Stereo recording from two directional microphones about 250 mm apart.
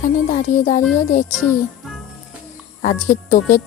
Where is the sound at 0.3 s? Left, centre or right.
Left.